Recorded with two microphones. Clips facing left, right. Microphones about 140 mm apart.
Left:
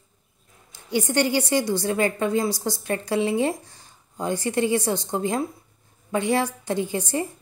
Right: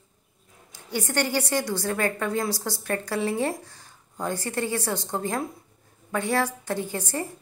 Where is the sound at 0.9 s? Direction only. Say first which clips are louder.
Left 4 dB; 15° left (ahead or behind).